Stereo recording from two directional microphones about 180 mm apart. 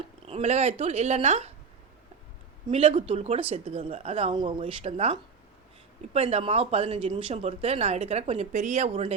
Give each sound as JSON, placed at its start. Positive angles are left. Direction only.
{"t": 0.3, "sound": "speech", "side_deg": -35}
{"t": 2.6, "sound": "speech", "side_deg": -30}